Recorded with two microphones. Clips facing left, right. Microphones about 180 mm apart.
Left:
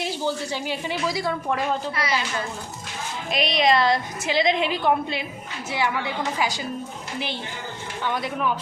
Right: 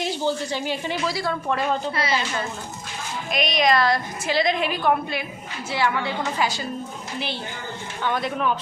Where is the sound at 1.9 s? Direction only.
25° right (ahead or behind).